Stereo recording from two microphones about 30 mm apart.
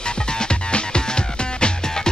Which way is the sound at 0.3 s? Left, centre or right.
Left.